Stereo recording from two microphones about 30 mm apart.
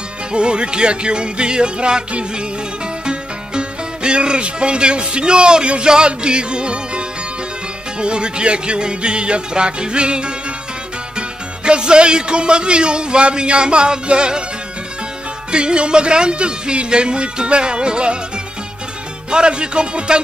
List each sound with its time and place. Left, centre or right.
0.3 s speech: right
3.1 s speech: right
15.5 s speech: right
19.3 s speech: right